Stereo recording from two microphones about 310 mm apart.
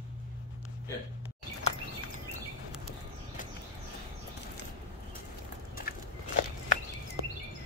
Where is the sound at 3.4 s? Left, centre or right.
Left.